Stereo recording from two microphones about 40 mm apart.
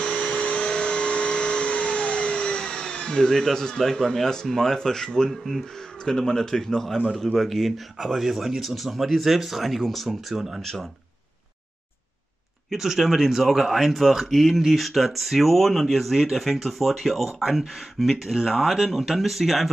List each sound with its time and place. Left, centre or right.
0.0 s vacuum cleaner: left; by 7.0 s centre
7.3 s speech: centre
10.6 s speech: centre
12.7 s speech: centre